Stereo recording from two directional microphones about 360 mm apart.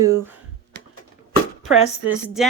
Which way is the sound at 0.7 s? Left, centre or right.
Right.